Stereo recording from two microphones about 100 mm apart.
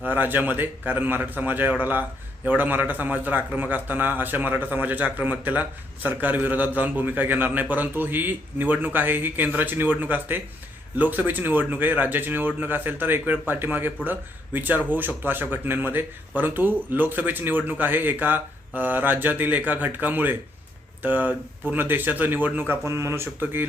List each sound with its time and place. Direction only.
0.0 s a man's voice: 20° right (ahead or behind)